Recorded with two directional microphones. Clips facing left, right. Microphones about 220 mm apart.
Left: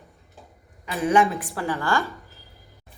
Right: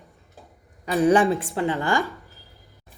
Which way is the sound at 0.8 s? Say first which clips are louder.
Right 3 dB; 35° right (ahead or behind).